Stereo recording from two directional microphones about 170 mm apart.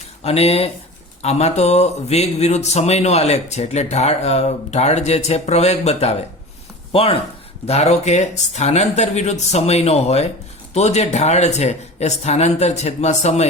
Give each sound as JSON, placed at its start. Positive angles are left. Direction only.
{"t": 0.3, "sound": "speech", "side_deg": 35}